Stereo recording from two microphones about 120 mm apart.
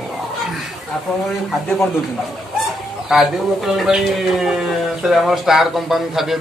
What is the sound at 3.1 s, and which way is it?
Speech, 5° right (ahead or behind).